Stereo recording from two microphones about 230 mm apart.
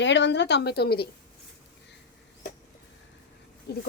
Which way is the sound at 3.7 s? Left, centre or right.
Left.